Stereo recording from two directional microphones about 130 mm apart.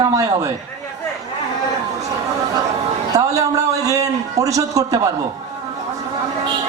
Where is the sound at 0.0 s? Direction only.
25° right (ahead or behind).